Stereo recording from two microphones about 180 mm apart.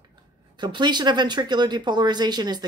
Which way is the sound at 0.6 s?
25° right (ahead or behind).